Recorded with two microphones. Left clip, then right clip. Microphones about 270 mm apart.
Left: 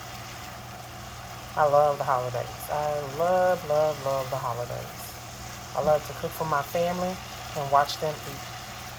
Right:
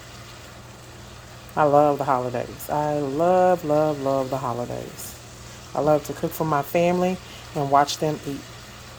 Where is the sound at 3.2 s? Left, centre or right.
Right.